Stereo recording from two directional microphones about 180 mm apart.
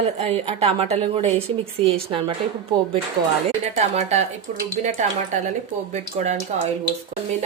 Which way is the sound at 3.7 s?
35° right (ahead or behind).